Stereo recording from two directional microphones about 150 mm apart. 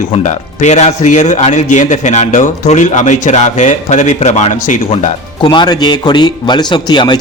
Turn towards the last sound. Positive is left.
turn(degrees=30)  # may be behind; listen again after turning